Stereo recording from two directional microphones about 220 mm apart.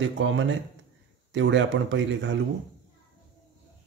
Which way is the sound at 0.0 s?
60° right (ahead or behind).